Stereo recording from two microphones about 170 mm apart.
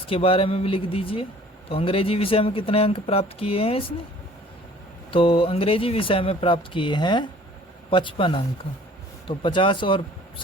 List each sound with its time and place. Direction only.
0.1 s speech: 35° left (ahead or behind)
5.1 s speech: 30° left (ahead or behind)